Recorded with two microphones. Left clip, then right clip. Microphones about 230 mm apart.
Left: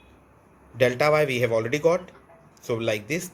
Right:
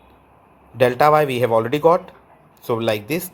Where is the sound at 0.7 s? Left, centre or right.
Centre.